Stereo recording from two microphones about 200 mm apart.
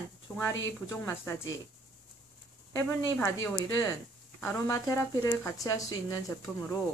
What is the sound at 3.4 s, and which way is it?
Speech, 15° left (ahead or behind).